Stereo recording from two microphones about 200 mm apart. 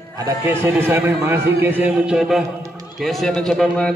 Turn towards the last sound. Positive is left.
turn(degrees=5)  # may be behind; listen again after turning